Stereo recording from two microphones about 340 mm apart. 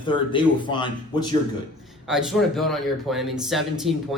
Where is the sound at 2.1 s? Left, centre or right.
Centre.